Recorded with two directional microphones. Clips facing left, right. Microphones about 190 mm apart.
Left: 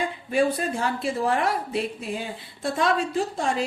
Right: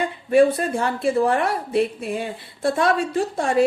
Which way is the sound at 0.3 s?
60° right (ahead or behind).